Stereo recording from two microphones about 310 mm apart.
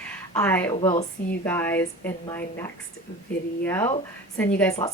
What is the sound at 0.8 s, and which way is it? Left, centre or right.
Speech, centre.